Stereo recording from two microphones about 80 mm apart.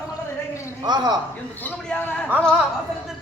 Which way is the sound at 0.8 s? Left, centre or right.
Right.